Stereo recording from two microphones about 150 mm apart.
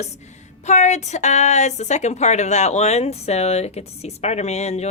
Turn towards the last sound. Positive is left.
turn(degrees=45)  # may be behind; listen again after turning